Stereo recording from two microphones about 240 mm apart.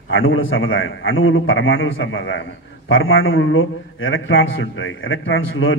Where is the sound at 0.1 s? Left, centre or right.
Left.